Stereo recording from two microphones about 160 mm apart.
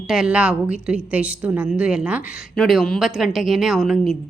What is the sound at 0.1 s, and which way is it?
A woman's voice, 5° right (ahead or behind).